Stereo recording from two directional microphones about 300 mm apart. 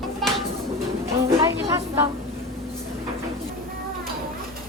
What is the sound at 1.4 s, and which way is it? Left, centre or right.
Speech, centre.